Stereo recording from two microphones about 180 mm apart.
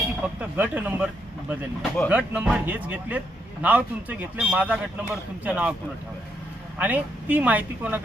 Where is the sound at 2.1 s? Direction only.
5° right (ahead or behind).